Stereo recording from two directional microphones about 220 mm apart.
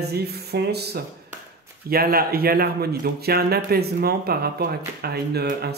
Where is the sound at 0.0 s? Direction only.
45° right (ahead or behind).